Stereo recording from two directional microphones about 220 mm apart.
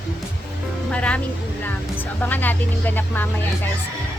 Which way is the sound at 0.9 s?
5° left (ahead or behind).